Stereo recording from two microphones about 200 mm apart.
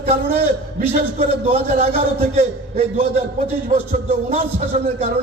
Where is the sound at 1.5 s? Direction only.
30° right (ahead or behind).